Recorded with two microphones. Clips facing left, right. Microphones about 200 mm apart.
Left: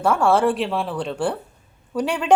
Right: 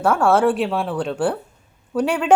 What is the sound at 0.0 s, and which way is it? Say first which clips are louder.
A woman's voice: right 1 dB; 5° right (ahead or behind).